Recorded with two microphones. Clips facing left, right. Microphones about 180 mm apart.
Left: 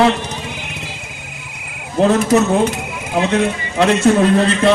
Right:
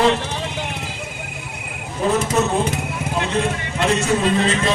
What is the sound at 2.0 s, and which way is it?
Speech, 75° left (ahead or behind).